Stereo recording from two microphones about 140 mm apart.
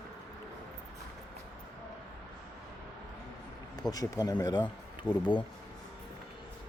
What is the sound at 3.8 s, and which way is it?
Speech, 25° left (ahead or behind).